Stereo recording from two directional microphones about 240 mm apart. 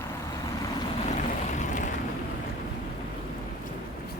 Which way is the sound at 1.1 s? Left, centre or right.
Left.